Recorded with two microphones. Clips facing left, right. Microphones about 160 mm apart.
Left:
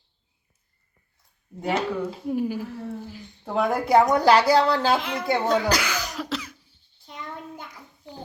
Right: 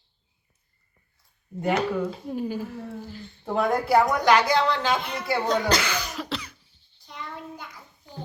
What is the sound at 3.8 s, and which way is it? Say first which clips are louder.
Speech: left 6 dB; 20° left (ahead or behind).